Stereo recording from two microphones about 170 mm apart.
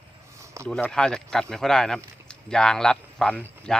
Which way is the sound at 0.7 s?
5° left (ahead or behind).